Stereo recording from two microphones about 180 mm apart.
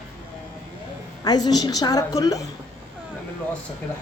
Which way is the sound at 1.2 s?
20° left (ahead or behind).